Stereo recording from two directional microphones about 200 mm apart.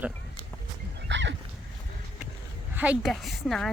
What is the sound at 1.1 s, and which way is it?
Dog, 65° right (ahead or behind).